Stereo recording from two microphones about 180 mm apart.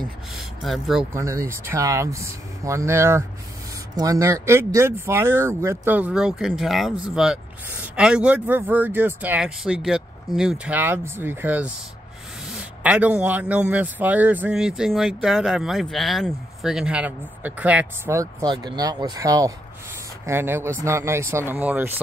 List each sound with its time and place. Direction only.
0.7 s speech: centre (ahead or behind)
1.1 s a man's voice: 15° right (ahead or behind)
12.8 s a man's voice: 5° right (ahead or behind)